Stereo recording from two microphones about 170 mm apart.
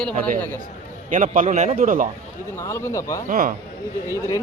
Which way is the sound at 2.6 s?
15° left (ahead or behind).